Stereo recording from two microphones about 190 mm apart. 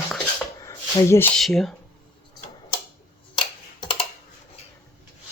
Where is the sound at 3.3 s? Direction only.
25° left (ahead or behind).